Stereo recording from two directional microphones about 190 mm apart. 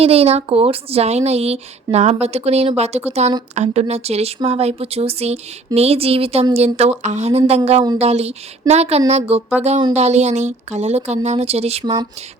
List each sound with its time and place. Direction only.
0.0 s speech: 30° right (ahead or behind)